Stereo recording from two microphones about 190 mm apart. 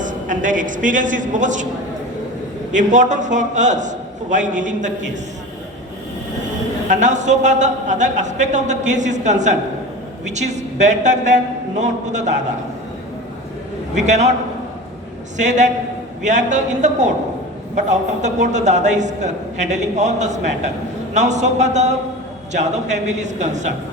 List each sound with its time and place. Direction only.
0.0 s a man's voice: 45° right (ahead or behind)
2.7 s a man's voice: 40° right (ahead or behind)
6.8 s a man's voice: 40° right (ahead or behind)
13.9 s a man's voice: 40° right (ahead or behind)
15.4 s a man's voice: 40° right (ahead or behind)